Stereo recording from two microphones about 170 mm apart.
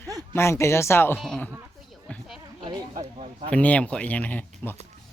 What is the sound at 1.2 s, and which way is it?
Speech, 5° left (ahead or behind).